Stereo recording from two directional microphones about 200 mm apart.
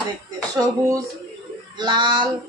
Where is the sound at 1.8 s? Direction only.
20° right (ahead or behind).